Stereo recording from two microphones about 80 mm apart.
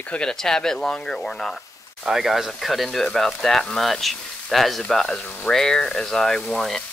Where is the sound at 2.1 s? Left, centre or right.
Centre.